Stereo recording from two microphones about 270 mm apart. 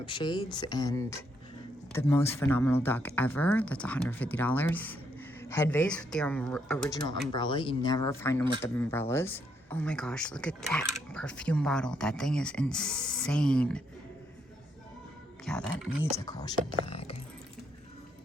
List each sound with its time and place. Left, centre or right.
0.0 s speech: centre
7.3 s speech: centre
15.4 s speech: centre
16.2 s speech: centre
16.8 s a sound: left